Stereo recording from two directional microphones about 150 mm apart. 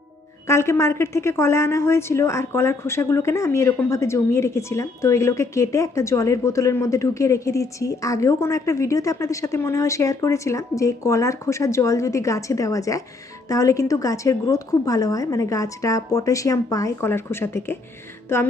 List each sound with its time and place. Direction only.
0.4 s a woman's voice: 20° left (ahead or behind)
18.3 s music: 15° left (ahead or behind)